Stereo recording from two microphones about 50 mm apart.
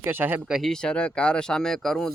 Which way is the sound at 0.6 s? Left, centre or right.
Centre.